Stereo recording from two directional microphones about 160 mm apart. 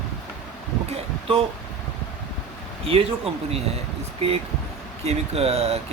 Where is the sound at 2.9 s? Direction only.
35° right (ahead or behind).